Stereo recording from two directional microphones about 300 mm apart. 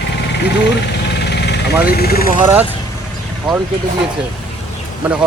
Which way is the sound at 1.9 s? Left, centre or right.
Left.